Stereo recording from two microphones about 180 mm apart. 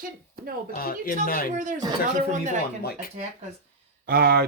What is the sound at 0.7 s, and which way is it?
Speech, 55° left (ahead or behind).